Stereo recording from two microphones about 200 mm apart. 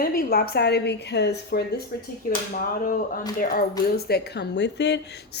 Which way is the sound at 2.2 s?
45° left (ahead or behind).